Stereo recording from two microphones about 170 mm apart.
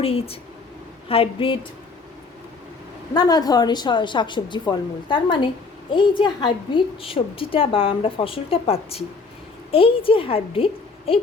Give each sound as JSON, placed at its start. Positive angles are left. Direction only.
{"t": 0.0, "sound": "speech", "side_deg": 35}
{"t": 3.2, "sound": "a woman's voice", "side_deg": 25}